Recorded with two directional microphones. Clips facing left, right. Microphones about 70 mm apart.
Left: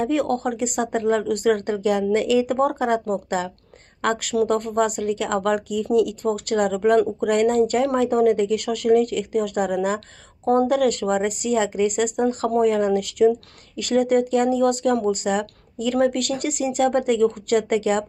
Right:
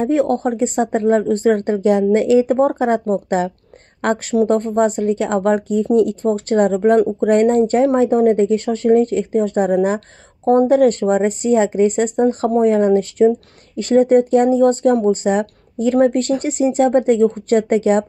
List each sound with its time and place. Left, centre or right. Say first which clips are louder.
0.0 s speech: right 5 dB; right